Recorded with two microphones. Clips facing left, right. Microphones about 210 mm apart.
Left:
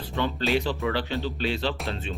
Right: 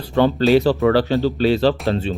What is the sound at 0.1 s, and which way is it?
Speech, 40° right (ahead or behind).